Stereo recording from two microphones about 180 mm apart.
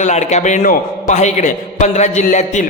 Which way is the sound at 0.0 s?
40° left (ahead or behind).